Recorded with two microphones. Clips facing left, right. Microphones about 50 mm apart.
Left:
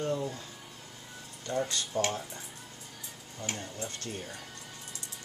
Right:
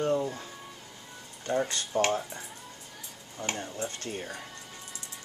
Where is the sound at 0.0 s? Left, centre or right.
Right.